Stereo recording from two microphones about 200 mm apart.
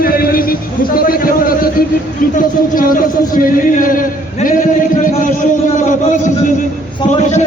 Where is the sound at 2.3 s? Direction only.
45° left (ahead or behind).